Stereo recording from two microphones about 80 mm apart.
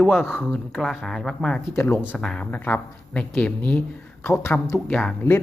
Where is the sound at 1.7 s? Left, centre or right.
Left.